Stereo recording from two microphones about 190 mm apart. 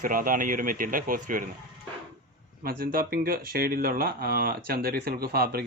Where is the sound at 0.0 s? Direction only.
45° right (ahead or behind).